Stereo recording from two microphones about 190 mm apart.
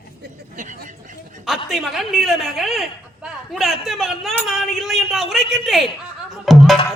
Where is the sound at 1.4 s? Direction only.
Centre (ahead or behind).